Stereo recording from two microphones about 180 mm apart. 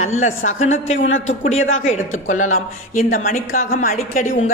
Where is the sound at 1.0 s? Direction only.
90° left.